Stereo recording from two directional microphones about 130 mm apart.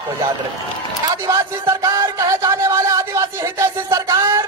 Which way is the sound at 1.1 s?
20° right (ahead or behind).